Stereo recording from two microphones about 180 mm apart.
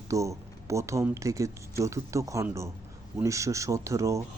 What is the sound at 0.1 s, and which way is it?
Speech, 15° right (ahead or behind).